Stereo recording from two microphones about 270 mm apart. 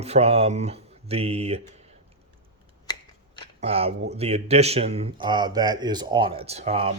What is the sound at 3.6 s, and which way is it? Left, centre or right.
A man's voice, right.